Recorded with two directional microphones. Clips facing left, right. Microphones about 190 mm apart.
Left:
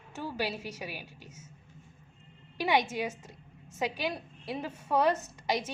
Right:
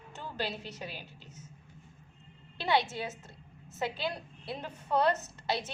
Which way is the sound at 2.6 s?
15° left (ahead or behind).